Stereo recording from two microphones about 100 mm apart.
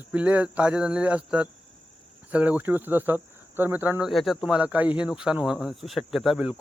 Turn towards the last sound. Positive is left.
turn(degrees=-5)  # may be behind; listen again after turning